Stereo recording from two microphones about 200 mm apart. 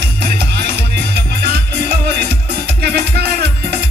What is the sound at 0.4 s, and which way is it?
Music, 55° right (ahead or behind).